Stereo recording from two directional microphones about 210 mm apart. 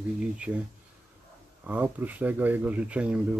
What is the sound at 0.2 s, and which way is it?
Speech, 5° right (ahead or behind).